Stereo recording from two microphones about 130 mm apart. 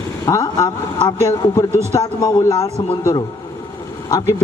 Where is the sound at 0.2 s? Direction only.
30° left (ahead or behind).